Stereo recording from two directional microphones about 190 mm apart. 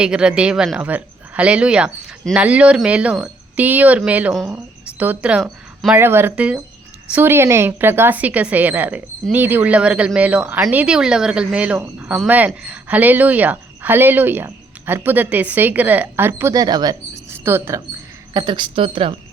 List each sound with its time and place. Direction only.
0.0 s speech: 5° right (ahead or behind)
18.3 s speech: 25° right (ahead or behind)